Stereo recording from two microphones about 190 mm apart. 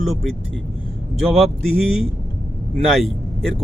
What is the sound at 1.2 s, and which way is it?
Speech, centre (ahead or behind).